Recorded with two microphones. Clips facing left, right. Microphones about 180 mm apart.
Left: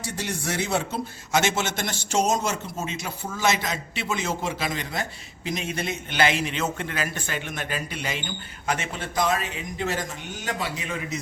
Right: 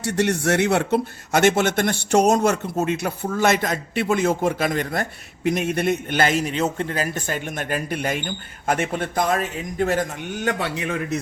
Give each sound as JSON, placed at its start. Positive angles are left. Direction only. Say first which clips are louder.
{"t": 0.0, "sound": "a man's voice", "louder": "right 10 dB", "side_deg": -70}